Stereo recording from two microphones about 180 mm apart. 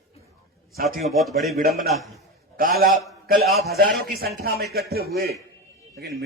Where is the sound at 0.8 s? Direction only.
50° right (ahead or behind).